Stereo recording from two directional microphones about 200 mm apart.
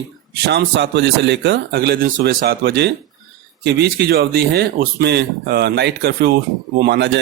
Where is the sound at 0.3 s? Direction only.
55° right (ahead or behind).